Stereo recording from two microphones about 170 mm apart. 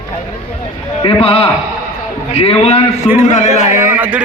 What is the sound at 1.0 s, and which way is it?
A man's voice, 35° left (ahead or behind).